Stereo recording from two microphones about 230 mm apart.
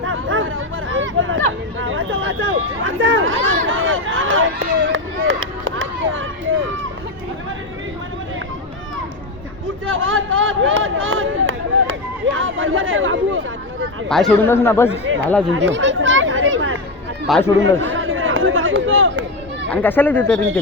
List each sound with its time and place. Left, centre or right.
0.0 s chatter: right
3.7 s run: right
9.8 s a sound: right
14.1 s a man's voice: centre
15.1 s speech: right
15.5 s chatter: right
17.2 s a man's voice: centre
17.6 s chatter: right
19.7 s a man's voice: centre